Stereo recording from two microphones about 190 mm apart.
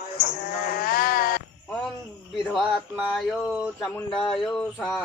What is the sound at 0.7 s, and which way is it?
Sheep, 50° left (ahead or behind).